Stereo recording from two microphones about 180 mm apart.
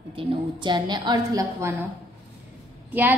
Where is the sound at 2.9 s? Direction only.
10° right (ahead or behind).